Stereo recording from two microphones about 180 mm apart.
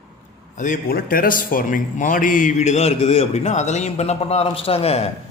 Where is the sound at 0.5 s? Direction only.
45° left (ahead or behind).